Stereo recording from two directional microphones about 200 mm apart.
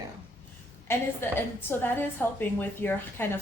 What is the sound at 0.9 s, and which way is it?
A woman's voice, 10° left (ahead or behind).